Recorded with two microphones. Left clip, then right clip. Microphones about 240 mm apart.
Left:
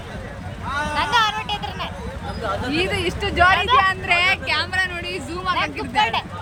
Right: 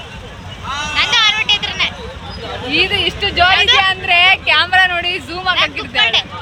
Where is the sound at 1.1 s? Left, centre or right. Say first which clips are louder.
Right 8 dB; left.